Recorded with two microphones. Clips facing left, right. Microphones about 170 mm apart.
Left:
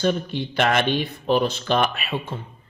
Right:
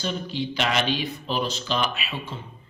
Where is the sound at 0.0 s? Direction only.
55° left (ahead or behind).